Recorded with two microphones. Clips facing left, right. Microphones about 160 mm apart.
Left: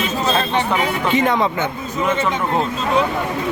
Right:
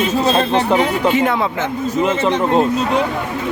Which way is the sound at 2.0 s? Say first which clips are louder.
Right 3 dB; 25° right (ahead or behind).